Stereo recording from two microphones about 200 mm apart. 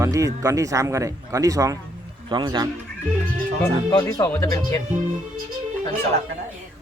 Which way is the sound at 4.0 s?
15° left (ahead or behind).